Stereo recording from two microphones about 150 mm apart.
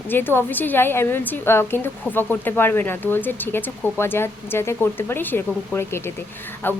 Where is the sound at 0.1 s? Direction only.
15° left (ahead or behind).